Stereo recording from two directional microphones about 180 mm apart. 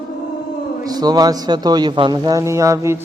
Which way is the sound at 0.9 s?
20° right (ahead or behind).